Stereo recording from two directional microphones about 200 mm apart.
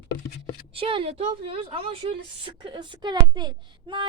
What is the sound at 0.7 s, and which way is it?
Speech, 25° right (ahead or behind).